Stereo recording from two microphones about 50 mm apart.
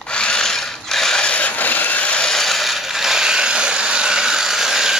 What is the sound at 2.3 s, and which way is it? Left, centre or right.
Ratchet, centre.